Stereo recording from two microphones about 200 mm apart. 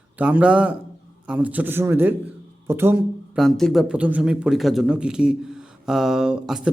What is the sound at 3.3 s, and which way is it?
Speech, centre (ahead or behind).